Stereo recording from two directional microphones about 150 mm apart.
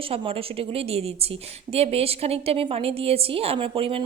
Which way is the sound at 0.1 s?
40° right (ahead or behind).